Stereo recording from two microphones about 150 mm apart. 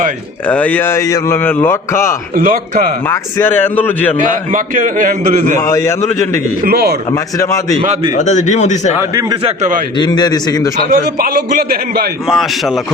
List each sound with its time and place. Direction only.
0.4 s speech: 10° left (ahead or behind)
2.3 s a man's voice: 70° right (ahead or behind)
3.1 s speech: 15° left (ahead or behind)
4.5 s a man's voice: 60° right (ahead or behind)
5.5 s a man's voice: 20° left (ahead or behind)
6.6 s a man's voice: 90° right
8.1 s speech: 55° left (ahead or behind)
9.3 s a man's voice: 40° right (ahead or behind)
10.0 s a man's voice: 30° left (ahead or behind)
10.8 s a man's voice: 75° right (ahead or behind)
12.3 s a man's voice: centre (ahead or behind)